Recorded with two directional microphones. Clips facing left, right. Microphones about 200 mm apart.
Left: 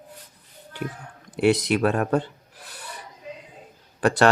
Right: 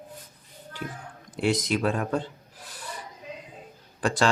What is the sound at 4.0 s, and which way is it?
Speech, 65° left (ahead or behind).